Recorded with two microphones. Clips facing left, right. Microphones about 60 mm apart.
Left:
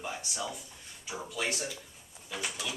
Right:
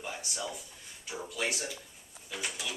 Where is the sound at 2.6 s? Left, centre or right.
Centre.